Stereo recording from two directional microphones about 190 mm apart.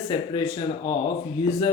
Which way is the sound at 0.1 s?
25° left (ahead or behind).